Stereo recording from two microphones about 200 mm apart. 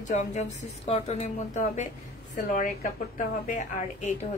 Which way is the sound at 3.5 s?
40° left (ahead or behind).